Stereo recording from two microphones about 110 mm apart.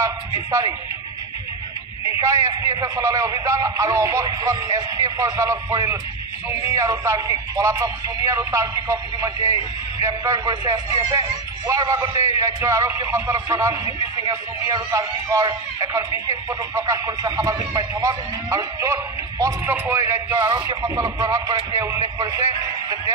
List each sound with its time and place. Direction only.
0.0 s speech: 30° right (ahead or behind)
2.2 s a man's voice: 30° right (ahead or behind)